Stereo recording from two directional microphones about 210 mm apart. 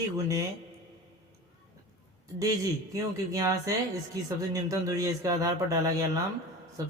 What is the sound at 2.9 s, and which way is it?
Speech, 15° right (ahead or behind).